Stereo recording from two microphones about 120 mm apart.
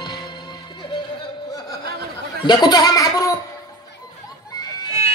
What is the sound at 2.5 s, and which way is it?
Speech, 35° left (ahead or behind).